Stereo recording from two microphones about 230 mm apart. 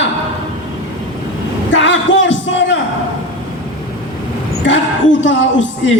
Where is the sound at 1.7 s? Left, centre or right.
Left.